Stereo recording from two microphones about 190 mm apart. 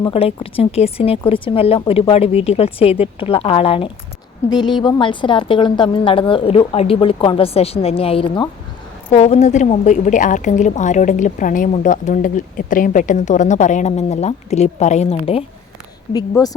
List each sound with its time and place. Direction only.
0.0 s a woman's voice: 30° left (ahead or behind)
16.3 s a woman's voice: 20° left (ahead or behind)